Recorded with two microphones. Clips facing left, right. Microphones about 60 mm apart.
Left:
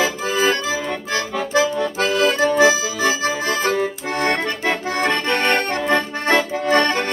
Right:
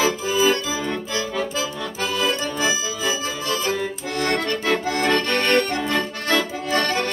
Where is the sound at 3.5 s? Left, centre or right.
Left.